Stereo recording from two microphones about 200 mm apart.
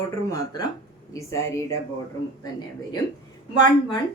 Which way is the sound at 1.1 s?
15° left (ahead or behind).